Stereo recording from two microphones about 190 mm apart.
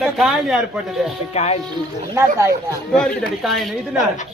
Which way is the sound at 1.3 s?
35° left (ahead or behind).